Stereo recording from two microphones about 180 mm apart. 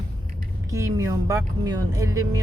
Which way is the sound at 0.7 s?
15° right (ahead or behind).